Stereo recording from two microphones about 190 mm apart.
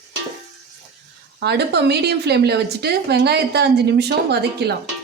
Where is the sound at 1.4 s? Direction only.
60° right (ahead or behind).